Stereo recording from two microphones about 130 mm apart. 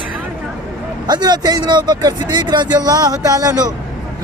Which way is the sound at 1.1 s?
30° right (ahead or behind).